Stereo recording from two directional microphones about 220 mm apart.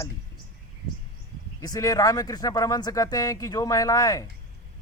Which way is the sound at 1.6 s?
15° left (ahead or behind).